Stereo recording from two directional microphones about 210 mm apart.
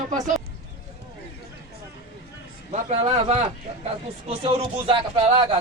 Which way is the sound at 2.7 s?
30° right (ahead or behind).